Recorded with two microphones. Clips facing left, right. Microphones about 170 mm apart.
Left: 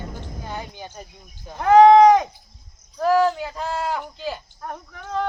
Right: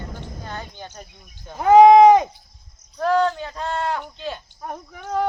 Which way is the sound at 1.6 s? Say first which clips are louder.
Right 1 dB; 15° right (ahead or behind).